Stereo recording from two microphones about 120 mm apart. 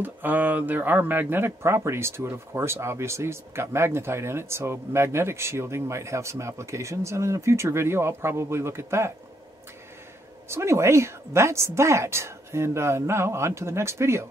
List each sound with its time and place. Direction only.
0.0 s speech: 15° right (ahead or behind)
10.5 s speech: 25° right (ahead or behind)